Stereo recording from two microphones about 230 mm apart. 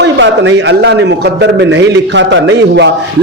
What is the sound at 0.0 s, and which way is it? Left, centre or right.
A man's voice, right.